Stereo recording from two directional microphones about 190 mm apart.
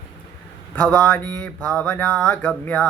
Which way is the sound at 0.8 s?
5° left (ahead or behind).